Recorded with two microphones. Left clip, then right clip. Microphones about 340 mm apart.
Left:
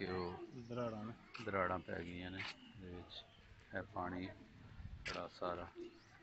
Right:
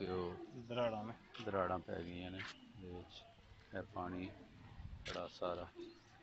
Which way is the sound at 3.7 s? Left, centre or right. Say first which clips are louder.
Left 1 dB; centre.